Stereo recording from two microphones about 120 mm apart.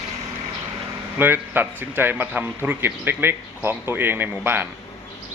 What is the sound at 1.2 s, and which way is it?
A man's voice, 15° right (ahead or behind).